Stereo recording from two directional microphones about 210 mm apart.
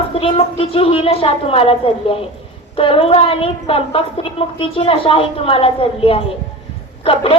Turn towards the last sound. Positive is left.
turn(degrees=25)  # may be behind; listen again after turning